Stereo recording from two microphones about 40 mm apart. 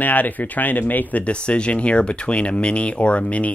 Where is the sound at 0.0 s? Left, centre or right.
Left.